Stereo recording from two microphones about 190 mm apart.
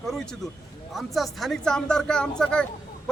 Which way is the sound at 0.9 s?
Centre (ahead or behind).